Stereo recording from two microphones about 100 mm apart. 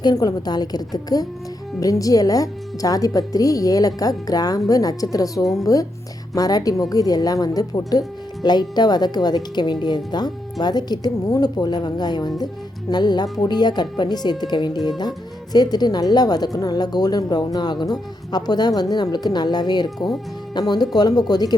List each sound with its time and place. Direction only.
0.0 s speech: 40° left (ahead or behind)